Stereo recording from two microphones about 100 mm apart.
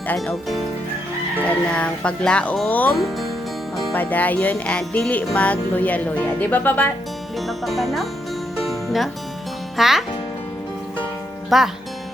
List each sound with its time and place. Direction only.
1.5 s music: 10° left (ahead or behind)
3.9 s music: 15° left (ahead or behind)
7.3 s speech: centre (ahead or behind)
8.5 s music: centre (ahead or behind)
9.7 s a child's voice: 5° right (ahead or behind)
11.4 s speech: centre (ahead or behind)